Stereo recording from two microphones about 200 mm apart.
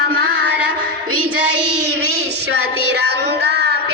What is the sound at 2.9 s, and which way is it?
Child singing, 55° right (ahead or behind).